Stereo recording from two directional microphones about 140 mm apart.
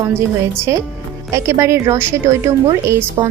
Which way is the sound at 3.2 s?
45° right (ahead or behind).